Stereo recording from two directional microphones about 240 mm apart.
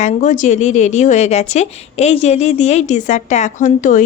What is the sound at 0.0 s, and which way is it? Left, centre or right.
A woman's voice, left.